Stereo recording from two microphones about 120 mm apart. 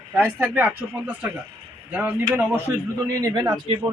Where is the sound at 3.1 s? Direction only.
30° right (ahead or behind).